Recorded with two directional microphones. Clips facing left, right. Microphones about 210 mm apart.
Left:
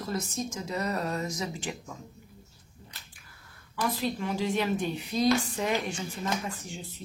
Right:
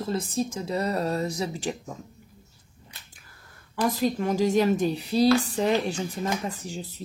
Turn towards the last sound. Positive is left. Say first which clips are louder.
# right 4 dB
turn(degrees=-35)  # may be behind; listen again after turning